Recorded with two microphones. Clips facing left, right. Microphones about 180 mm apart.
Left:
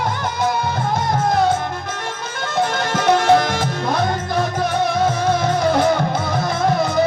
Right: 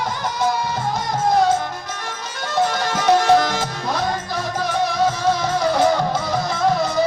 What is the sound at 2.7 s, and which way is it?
Music, 55° left (ahead or behind).